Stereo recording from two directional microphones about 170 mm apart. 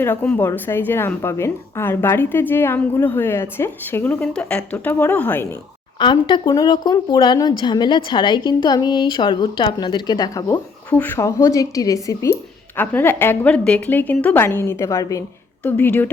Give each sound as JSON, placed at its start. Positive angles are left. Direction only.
{"t": 0.0, "sound": "a woman's voice", "side_deg": 10}
{"t": 6.0, "sound": "a woman's voice", "side_deg": 30}